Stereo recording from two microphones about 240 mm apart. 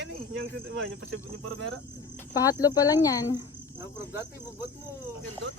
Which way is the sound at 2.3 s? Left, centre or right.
Centre.